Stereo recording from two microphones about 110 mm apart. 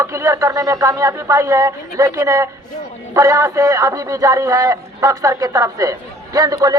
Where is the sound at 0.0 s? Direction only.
25° right (ahead or behind).